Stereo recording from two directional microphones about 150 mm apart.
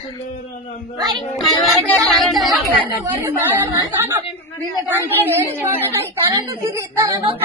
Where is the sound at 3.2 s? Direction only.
15° right (ahead or behind).